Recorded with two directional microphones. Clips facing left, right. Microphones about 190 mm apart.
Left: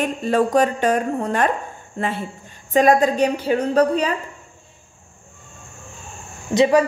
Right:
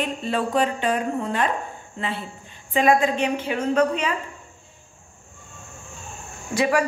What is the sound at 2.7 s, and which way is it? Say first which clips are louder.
A woman's voice: left 4 dB; 40° left (ahead or behind).